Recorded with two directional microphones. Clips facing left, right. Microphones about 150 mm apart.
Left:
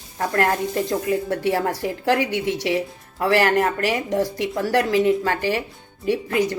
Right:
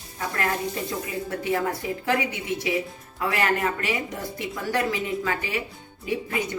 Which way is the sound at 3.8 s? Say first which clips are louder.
Left 8 dB; 90° left.